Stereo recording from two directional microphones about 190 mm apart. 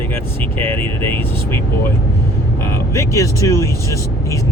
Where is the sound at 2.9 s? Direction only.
15° left (ahead or behind).